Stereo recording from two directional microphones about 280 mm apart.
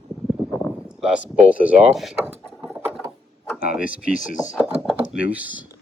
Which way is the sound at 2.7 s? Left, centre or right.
Centre.